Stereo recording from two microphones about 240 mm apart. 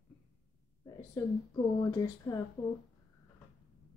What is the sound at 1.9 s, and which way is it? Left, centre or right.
Speech, centre.